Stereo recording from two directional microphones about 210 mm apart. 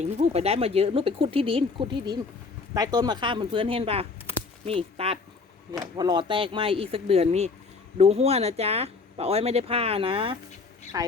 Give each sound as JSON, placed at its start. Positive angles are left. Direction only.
{"t": 0.0, "sound": "speech", "side_deg": -30}
{"t": 10.9, "sound": "a woman's voice", "side_deg": -15}